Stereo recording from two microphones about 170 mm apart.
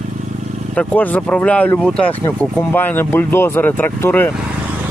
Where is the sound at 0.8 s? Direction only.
10° left (ahead or behind).